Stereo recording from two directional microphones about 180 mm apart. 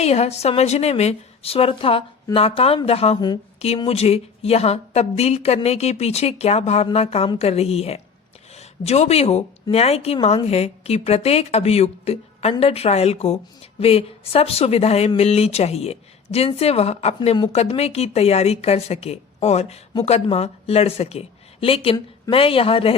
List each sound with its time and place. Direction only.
0.0 s a woman's voice: 35° left (ahead or behind)
17.2 s speech: 25° left (ahead or behind)
17.5 s a woman's voice: 35° left (ahead or behind)